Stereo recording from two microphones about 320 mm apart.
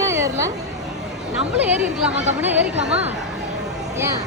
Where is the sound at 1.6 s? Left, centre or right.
Centre.